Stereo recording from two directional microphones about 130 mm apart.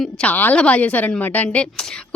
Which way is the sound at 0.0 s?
10° left (ahead or behind).